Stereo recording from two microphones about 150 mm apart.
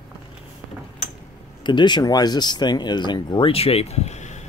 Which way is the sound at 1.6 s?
30° left (ahead or behind).